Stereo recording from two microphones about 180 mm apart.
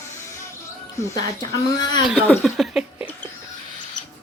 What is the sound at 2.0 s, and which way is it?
Speech, centre (ahead or behind).